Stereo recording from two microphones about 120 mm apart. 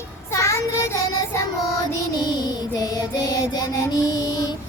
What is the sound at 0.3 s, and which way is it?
Child singing, 25° left (ahead or behind).